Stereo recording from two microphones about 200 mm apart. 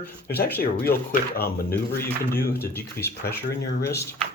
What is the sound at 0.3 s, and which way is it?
Speech, 55° left (ahead or behind).